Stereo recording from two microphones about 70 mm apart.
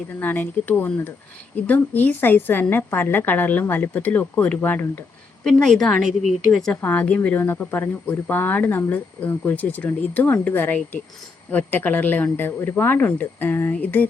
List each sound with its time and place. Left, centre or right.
0.2 s speech: left
5.4 s a woman's voice: centre
6.8 s speech: left